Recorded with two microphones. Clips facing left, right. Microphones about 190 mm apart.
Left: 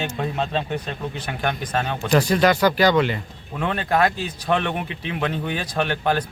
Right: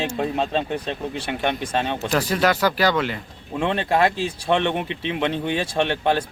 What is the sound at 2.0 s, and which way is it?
Speech, 5° right (ahead or behind).